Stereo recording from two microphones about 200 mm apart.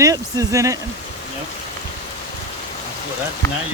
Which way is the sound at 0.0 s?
15° right (ahead or behind).